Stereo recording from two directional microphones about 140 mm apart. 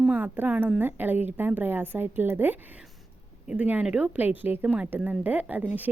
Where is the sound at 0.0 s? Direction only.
10° right (ahead or behind).